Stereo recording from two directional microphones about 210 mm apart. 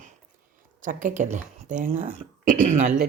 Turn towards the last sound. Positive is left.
turn(degrees=-35)  # may be behind; listen again after turning